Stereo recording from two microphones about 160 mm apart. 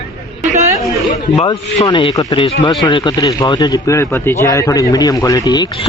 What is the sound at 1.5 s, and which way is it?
A man's voice, 30° left (ahead or behind).